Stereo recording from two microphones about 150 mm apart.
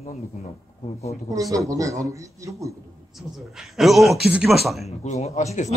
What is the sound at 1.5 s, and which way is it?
Speech, 20° right (ahead or behind).